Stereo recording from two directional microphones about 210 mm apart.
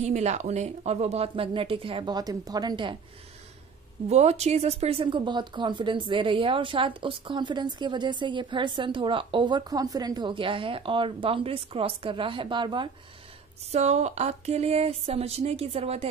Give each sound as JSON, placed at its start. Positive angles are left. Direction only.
{"t": 0.0, "sound": "speech", "side_deg": -30}
{"t": 4.1, "sound": "speech", "side_deg": -30}
{"t": 13.7, "sound": "speech", "side_deg": -30}